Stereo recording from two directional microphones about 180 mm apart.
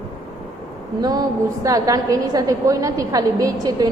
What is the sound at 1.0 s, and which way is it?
A woman's voice, 20° right (ahead or behind).